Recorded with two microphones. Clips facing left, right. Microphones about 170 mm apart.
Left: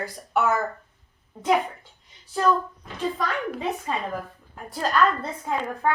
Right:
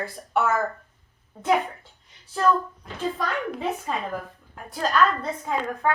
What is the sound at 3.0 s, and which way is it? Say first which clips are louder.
A woman's voice: even; centre (ahead or behind).